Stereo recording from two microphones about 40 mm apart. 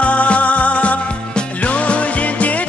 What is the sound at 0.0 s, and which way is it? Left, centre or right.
Music, left.